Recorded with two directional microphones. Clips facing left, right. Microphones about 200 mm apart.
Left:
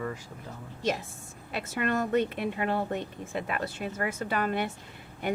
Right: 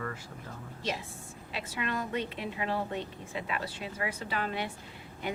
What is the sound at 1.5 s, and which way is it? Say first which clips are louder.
A woman's voice: left 6 dB; 50° left (ahead or behind).